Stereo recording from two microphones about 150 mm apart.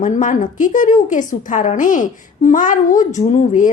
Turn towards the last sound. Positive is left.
turn(degrees=55)  # may be behind; listen again after turning